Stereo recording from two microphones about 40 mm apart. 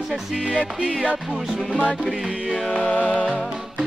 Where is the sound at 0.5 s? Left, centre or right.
Left.